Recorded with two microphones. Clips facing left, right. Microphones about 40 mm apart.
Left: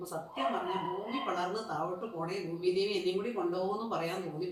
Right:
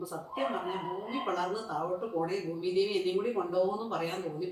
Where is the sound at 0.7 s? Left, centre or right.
Centre.